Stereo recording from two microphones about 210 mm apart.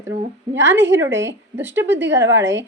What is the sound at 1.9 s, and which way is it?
Speech, 60° right (ahead or behind).